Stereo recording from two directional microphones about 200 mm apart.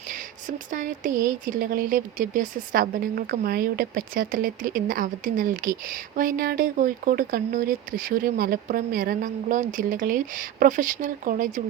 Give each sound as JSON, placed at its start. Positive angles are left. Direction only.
{"t": 0.1, "sound": "speech", "side_deg": -40}